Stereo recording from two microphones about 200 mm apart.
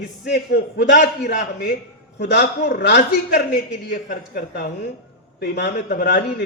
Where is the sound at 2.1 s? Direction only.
55° left (ahead or behind).